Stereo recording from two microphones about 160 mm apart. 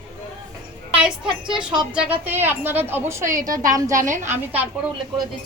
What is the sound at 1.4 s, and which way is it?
Speech, 30° right (ahead or behind).